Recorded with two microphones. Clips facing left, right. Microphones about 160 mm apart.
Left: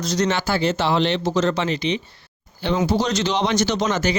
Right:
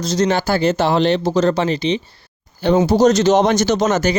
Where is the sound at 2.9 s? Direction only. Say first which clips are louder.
Right 9 dB; 45° right (ahead or behind).